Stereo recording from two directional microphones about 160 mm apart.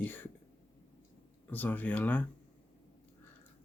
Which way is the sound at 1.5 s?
10° left (ahead or behind).